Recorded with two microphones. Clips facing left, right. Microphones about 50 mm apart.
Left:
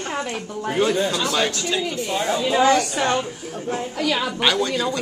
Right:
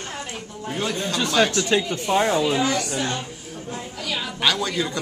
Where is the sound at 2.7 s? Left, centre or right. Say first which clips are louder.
Left 5 dB; left.